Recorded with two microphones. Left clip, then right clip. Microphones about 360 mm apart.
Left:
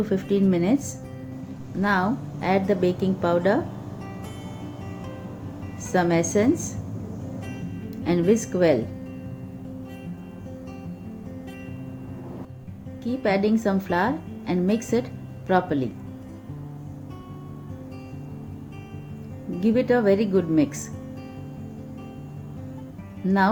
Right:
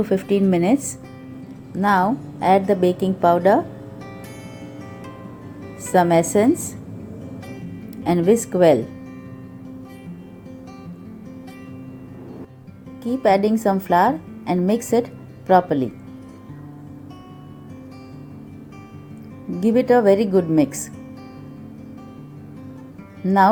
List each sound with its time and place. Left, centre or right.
0.0 s a woman's voice: centre
1.8 s a woman's voice: centre
5.9 s a woman's voice: centre
7.9 s a woman's voice: centre
13.2 s a woman's voice: centre
19.6 s a woman's voice: centre